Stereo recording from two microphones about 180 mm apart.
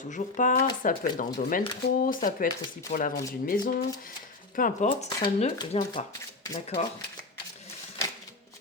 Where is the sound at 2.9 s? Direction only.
55° left (ahead or behind).